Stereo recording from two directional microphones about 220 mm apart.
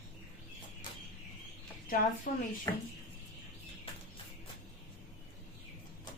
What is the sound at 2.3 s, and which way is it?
Speech, 40° left (ahead or behind).